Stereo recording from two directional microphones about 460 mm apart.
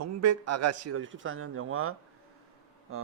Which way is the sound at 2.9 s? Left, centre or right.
Right.